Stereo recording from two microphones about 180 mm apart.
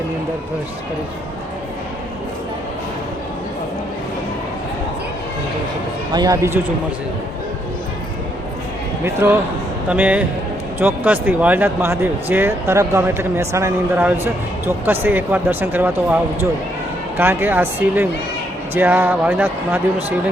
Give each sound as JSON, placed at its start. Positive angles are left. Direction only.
{"t": 6.1, "sound": "a man's voice", "side_deg": -20}
{"t": 9.0, "sound": "speech", "side_deg": -10}